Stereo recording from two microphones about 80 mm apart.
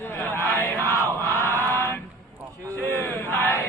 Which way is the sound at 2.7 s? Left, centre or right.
Left.